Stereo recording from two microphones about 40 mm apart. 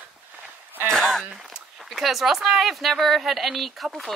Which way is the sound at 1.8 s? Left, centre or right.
Centre.